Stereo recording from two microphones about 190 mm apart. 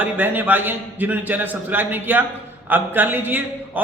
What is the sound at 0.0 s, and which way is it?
A man's voice, 10° right (ahead or behind).